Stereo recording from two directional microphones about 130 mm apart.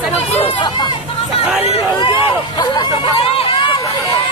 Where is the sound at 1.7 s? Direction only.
40° left (ahead or behind).